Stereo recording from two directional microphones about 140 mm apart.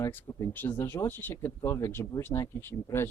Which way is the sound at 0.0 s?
15° left (ahead or behind).